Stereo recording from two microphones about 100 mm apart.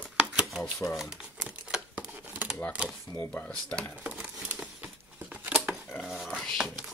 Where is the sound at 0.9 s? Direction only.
5° right (ahead or behind).